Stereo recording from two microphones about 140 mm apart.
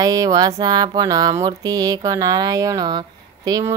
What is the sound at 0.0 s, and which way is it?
Speech, 25° right (ahead or behind).